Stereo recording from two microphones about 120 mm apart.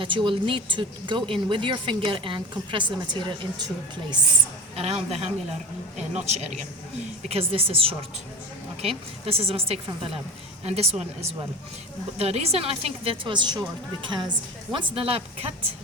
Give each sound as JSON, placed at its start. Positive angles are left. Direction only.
{"t": 0.0, "sound": "speech", "side_deg": -45}
{"t": 4.7, "sound": "speech", "side_deg": -60}
{"t": 7.3, "sound": "a woman's voice", "side_deg": -50}